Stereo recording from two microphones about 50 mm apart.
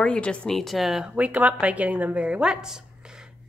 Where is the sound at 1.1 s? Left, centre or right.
Right.